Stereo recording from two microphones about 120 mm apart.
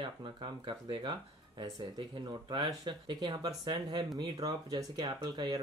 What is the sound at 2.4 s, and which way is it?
Speech, 40° right (ahead or behind).